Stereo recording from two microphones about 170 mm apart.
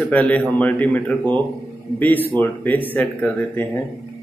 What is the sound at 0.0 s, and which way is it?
Speech, 10° left (ahead or behind).